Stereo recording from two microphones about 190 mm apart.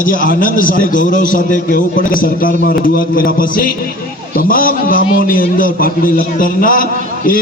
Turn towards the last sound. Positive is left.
turn(degrees=45)  # may be behind; listen again after turning